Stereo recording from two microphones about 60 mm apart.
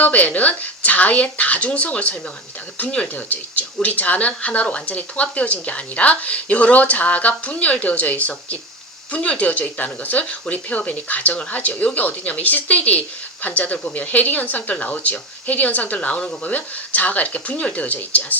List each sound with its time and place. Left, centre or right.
0.0 s speech: left